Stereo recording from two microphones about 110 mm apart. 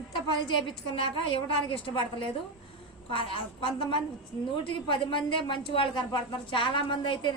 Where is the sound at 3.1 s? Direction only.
55° left (ahead or behind).